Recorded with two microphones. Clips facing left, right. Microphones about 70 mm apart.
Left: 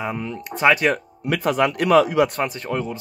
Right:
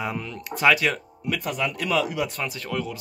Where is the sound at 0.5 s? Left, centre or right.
Left.